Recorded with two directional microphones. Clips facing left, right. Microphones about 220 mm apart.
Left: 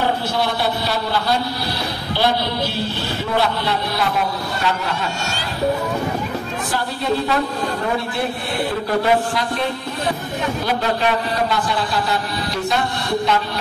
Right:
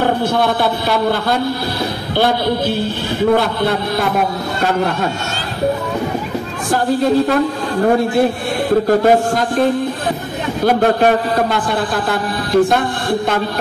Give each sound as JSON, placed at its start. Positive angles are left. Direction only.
{"t": 0.0, "sound": "a man's voice", "side_deg": -55}
{"t": 3.3, "sound": "a man's voice", "side_deg": -50}
{"t": 6.7, "sound": "a man's voice", "side_deg": -50}
{"t": 8.8, "sound": "a man's voice", "side_deg": -45}